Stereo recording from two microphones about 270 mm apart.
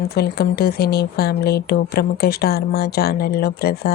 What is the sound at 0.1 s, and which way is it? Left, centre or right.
Speech, left.